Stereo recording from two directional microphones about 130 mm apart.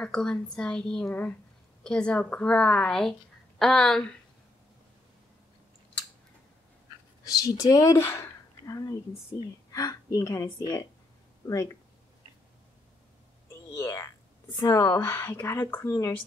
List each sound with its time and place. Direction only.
0.0 s a woman's voice: 5° left (ahead or behind)
7.2 s a woman's voice: 30° left (ahead or behind)
13.7 s a woman's voice: 25° left (ahead or behind)